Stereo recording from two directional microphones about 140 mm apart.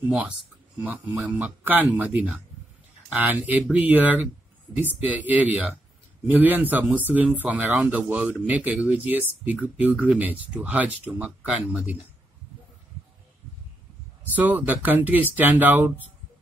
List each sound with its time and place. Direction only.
1.1 s speech: 10° right (ahead or behind)
14.3 s speech: 10° right (ahead or behind)